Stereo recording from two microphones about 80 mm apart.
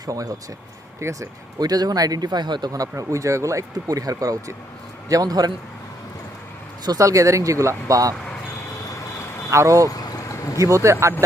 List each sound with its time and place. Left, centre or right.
0.0 s a man's voice: right
0.9 s speech: right
1.5 s speech: right
2.9 s a man's voice: right
7.0 s speech: right
9.5 s speech: right
9.9 s vehicle: left
10.6 s speech: right